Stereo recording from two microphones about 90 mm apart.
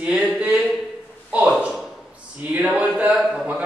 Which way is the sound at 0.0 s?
10° right (ahead or behind).